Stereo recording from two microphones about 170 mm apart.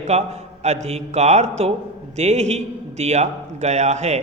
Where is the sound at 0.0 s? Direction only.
40° right (ahead or behind).